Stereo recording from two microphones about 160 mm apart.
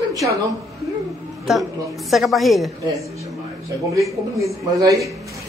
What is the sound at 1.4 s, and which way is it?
A woman's voice, centre (ahead or behind).